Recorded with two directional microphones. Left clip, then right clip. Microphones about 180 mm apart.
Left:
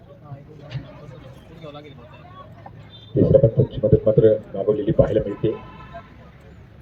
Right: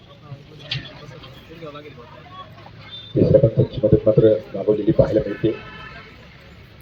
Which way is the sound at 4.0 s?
40° right (ahead or behind).